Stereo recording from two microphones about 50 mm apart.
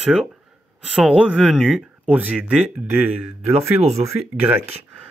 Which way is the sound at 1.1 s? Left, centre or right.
Right.